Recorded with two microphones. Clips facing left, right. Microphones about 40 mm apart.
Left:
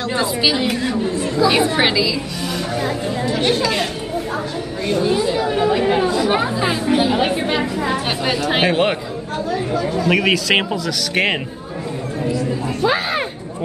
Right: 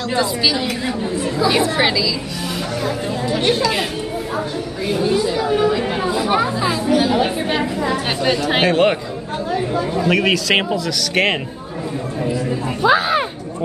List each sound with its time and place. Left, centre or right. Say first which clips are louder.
0.1 s a woman's voice: even; left
0.8 s speech: left 1 dB; centre
1.6 s speech: left 1 dB; centre
2.8 s speech: even; centre
5.0 s speech: right 1 dB; centre
6.0 s chatter: left 2 dB; centre
6.3 s speech: right 1 dB; centre
8.2 s speech: right 3 dB; centre
8.6 s speech: right 3 dB; centre
10.0 s speech: even; centre
12.8 s speech: right 4 dB; centre